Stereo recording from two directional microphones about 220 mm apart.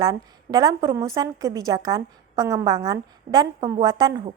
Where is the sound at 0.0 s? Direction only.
20° right (ahead or behind).